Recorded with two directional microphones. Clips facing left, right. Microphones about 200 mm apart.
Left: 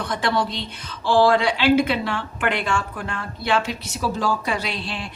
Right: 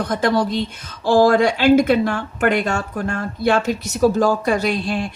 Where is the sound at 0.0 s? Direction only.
40° right (ahead or behind).